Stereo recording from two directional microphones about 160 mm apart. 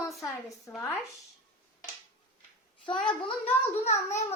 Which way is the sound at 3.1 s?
35° left (ahead or behind).